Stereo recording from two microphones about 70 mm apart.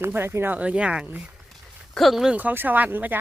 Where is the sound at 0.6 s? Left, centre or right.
Centre.